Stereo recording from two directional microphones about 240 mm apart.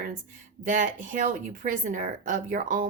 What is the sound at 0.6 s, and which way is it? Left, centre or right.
Speech, right.